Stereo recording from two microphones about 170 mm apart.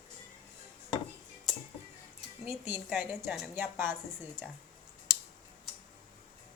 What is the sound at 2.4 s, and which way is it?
A woman's voice, 10° right (ahead or behind).